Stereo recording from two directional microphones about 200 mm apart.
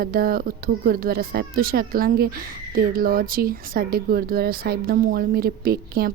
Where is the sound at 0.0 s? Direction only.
45° right (ahead or behind).